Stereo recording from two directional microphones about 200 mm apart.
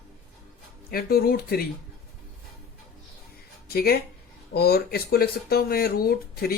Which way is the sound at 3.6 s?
50° left (ahead or behind).